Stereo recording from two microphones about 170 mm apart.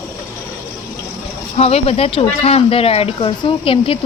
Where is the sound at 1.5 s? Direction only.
35° left (ahead or behind).